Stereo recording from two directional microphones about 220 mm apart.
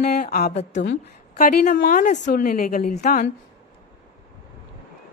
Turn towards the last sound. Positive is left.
turn(degrees=35)  # may be behind; listen again after turning